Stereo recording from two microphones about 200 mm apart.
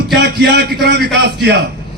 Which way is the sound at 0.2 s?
55° right (ahead or behind).